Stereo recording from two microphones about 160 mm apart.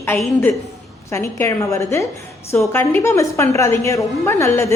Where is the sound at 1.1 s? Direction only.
15° left (ahead or behind).